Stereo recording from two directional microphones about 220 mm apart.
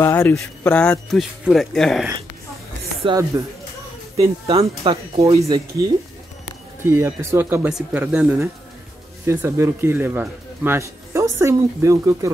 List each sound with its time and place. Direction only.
0.0 s speech: 10° left (ahead or behind)
3.0 s speech: 20° right (ahead or behind)
6.8 s a man's voice: 10° right (ahead or behind)